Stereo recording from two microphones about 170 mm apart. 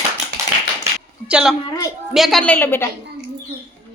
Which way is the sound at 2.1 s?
Centre (ahead or behind).